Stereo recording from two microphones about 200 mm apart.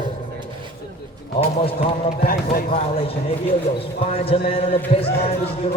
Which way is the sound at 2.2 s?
50° left (ahead or behind).